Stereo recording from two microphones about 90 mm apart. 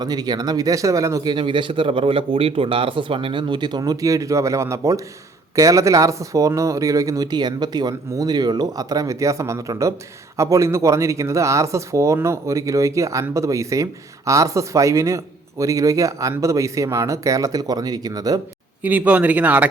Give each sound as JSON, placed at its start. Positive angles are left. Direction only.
{"t": 0.0, "sound": "speech", "side_deg": -50}
{"t": 1.2, "sound": "speech", "side_deg": -60}
{"t": 18.8, "sound": "speech", "side_deg": -15}